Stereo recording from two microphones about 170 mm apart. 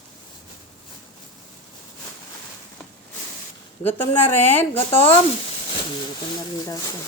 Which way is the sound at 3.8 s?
10° left (ahead or behind).